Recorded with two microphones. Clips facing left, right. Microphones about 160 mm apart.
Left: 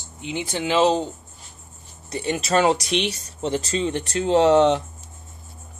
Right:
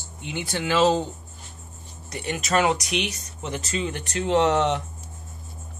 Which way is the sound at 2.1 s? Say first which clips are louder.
Left 3 dB; 25° left (ahead or behind).